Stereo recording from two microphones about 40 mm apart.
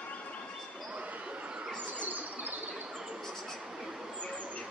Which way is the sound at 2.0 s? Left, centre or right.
Right.